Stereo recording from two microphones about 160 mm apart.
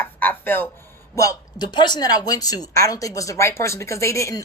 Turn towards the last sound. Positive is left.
turn(degrees=20)  # may be behind; listen again after turning